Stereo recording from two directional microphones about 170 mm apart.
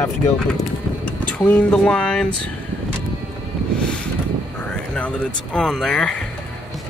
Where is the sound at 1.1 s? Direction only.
10° left (ahead or behind).